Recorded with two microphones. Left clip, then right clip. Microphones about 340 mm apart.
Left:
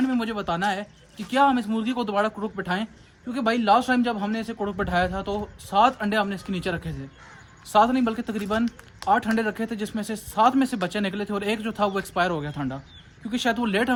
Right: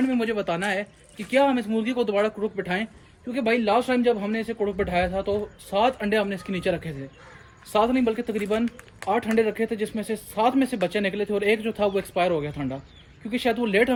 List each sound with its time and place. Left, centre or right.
0.2 s speech: centre